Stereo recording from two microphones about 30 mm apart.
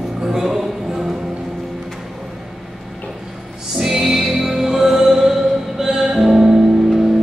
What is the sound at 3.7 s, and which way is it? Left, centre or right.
Music, centre.